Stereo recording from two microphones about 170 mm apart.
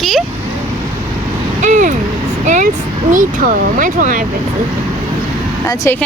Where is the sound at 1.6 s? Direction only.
50° right (ahead or behind).